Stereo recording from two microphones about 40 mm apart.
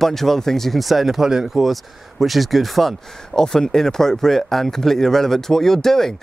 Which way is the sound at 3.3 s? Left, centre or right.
Centre.